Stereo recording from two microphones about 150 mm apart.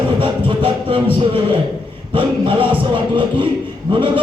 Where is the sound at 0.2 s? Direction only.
35° right (ahead or behind).